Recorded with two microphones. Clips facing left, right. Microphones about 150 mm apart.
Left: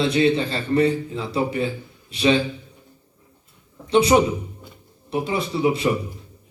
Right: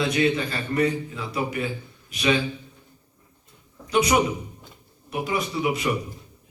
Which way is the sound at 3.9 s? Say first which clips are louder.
Left 5 dB; 30° left (ahead or behind).